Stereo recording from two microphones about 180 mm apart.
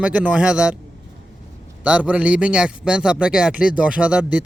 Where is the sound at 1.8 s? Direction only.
5° right (ahead or behind).